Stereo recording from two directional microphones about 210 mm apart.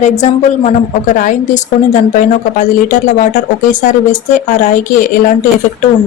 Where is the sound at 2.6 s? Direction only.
40° left (ahead or behind).